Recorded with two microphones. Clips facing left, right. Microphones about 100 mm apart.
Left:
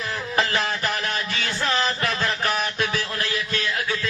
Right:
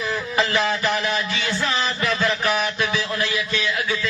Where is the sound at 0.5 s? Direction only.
45° left (ahead or behind).